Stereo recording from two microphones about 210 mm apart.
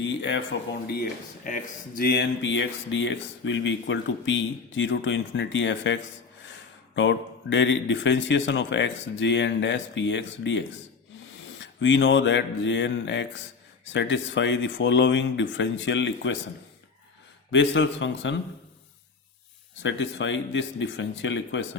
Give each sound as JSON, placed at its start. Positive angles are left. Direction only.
{"t": 0.0, "sound": "speech", "side_deg": 60}
{"t": 1.5, "sound": "speech", "side_deg": 40}
{"t": 11.6, "sound": "speech", "side_deg": 60}
{"t": 17.5, "sound": "speech", "side_deg": 60}
{"t": 19.8, "sound": "speech", "side_deg": 60}